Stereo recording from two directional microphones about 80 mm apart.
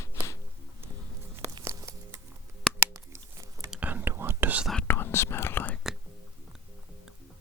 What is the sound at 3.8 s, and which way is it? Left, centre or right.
Whispering, right.